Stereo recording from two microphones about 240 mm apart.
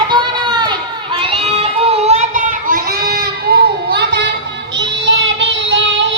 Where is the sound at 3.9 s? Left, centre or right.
Right.